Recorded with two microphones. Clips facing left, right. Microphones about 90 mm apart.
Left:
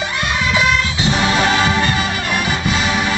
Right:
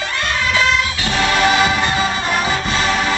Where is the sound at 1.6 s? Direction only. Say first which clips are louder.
Even; 25° right (ahead or behind).